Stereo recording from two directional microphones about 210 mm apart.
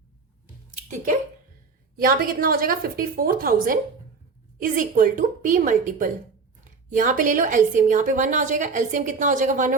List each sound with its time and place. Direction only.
2.0 s a woman's voice: 45° right (ahead or behind)